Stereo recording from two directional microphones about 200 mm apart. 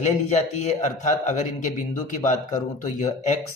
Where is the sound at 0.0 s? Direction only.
35° left (ahead or behind).